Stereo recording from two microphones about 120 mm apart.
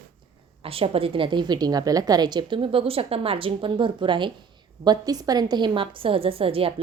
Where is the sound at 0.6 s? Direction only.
50° right (ahead or behind).